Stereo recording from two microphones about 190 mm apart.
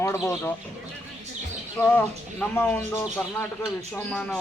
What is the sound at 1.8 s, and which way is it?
Speech, 10° left (ahead or behind).